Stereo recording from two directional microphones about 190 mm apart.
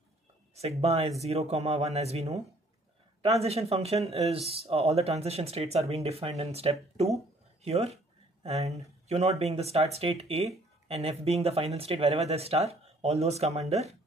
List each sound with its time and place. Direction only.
0.6 s speech: 35° right (ahead or behind)